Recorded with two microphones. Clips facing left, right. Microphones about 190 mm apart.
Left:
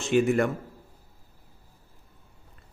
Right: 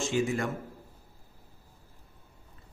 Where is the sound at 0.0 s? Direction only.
60° left (ahead or behind).